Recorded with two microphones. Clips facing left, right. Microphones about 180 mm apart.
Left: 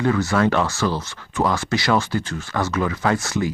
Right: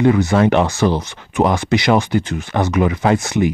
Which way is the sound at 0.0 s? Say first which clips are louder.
Right 5 dB; 20° right (ahead or behind).